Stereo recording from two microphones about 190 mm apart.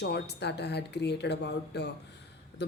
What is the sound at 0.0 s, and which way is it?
A woman's voice, 60° left (ahead or behind).